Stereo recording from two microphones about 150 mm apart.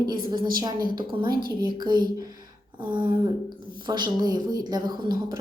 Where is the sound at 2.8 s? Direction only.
30° right (ahead or behind).